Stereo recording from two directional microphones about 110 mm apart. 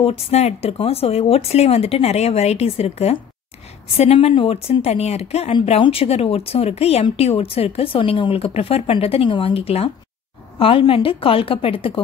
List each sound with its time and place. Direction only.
0.0 s speech: 75° left (ahead or behind); by 12.0 s 55° left (ahead or behind)